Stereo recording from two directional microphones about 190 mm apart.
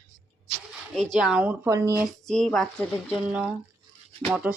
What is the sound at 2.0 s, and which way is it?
Speech, centre (ahead or behind).